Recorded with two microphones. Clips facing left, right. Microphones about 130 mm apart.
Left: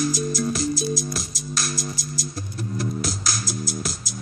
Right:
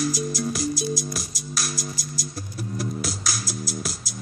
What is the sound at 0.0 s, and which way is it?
Music, 10° right (ahead or behind).